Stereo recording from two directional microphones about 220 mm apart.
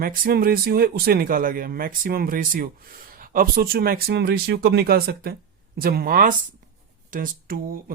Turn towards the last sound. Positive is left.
turn(degrees=-40)  # may be behind; listen again after turning